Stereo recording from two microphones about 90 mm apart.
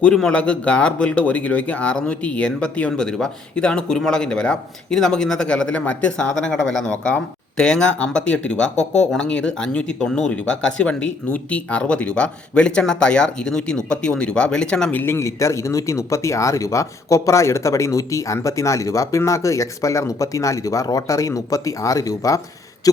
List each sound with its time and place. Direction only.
0.0 s speech: 10° left (ahead or behind)
14.9 s speech: 30° left (ahead or behind)